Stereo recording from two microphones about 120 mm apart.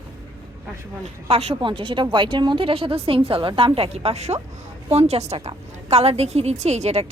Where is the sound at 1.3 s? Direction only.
55° right (ahead or behind).